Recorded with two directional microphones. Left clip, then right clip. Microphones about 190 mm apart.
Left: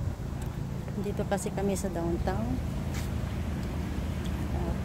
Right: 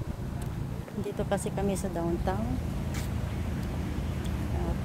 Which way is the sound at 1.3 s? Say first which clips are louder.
Even; centre (ahead or behind).